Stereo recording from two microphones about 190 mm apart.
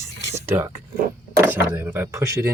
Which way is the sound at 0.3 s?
10° right (ahead or behind).